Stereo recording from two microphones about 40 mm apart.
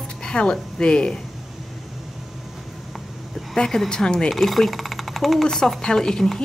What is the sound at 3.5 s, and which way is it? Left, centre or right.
Speech, centre.